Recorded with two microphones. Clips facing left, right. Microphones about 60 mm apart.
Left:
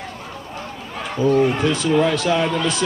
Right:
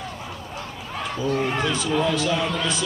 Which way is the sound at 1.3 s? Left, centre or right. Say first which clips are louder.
Left 8 dB; centre.